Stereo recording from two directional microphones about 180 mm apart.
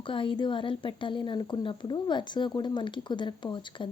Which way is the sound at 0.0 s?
30° left (ahead or behind).